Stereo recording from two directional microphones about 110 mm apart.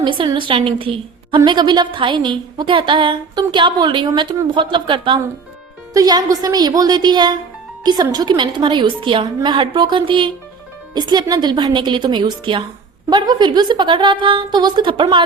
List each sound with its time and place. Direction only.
0.0 s a woman's voice: 50° right (ahead or behind)
1.5 s a woman's voice: 40° right (ahead or behind)
5.9 s a woman's voice: 35° right (ahead or behind)
9.2 s a woman's voice: 35° right (ahead or behind)